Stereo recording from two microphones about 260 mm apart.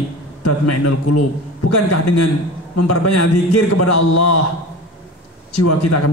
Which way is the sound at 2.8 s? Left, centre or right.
Left.